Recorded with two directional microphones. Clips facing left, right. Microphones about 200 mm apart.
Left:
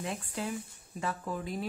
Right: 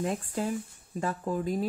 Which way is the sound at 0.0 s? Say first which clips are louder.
Right 6 dB; 45° right (ahead or behind).